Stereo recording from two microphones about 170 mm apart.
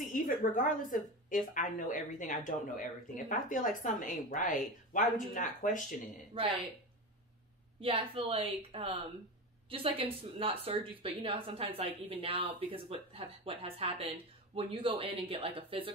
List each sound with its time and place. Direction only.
0.1 s speech: 50° left (ahead or behind)
6.3 s speech: 30° right (ahead or behind)
7.8 s speech: 35° right (ahead or behind)